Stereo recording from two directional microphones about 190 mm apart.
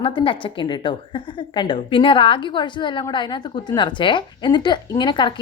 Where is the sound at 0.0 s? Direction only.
25° left (ahead or behind).